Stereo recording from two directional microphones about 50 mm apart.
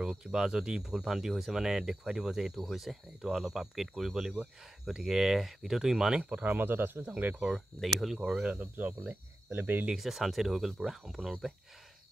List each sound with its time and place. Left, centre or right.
0.0 s speech: centre
6.4 s speech: right
7.1 s speech: right
7.8 s speech: centre
8.2 s speech: centre
8.5 s speech: right
9.9 s speech: centre